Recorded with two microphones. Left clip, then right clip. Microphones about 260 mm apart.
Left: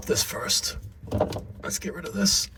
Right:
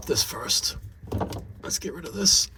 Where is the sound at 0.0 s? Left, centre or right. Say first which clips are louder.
Even; centre.